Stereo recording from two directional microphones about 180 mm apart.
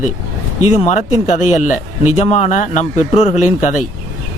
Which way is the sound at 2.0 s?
40° left (ahead or behind).